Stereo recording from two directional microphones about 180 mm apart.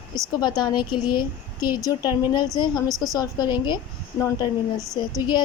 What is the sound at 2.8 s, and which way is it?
Speech, centre (ahead or behind).